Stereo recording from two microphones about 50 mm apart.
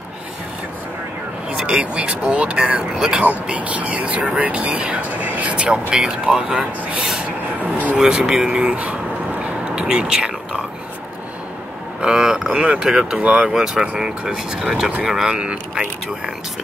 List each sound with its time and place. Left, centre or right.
1.7 s speech: centre
9.4 s a sound: centre
12.0 s speech: centre
13.2 s speech: right
13.5 s speech: centre